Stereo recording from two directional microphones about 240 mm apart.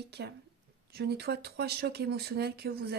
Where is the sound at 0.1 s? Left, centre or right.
Right.